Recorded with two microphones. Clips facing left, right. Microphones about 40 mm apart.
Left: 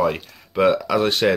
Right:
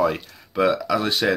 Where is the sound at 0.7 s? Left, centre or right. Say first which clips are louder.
Left 3 dB; left.